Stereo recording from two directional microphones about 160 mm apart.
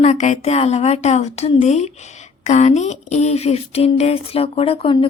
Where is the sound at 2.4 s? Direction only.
45° left (ahead or behind).